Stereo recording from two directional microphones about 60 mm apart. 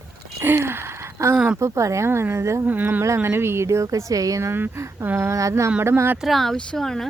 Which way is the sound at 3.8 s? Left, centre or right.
Right.